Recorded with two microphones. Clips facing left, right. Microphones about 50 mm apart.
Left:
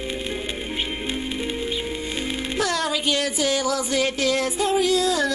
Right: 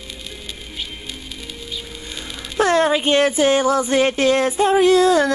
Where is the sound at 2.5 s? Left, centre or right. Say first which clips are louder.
Right 9 dB; right.